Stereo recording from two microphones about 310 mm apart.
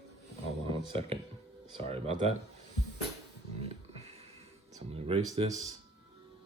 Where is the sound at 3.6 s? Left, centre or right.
Centre.